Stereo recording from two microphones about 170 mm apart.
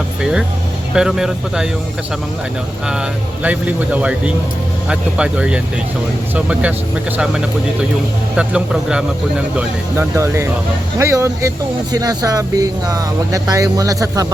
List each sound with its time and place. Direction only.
0.2 s speech: 5° right (ahead or behind)
2.8 s speech: 5° right (ahead or behind)
8.4 s speech: 5° right (ahead or behind)
9.6 s speech: 15° right (ahead or behind)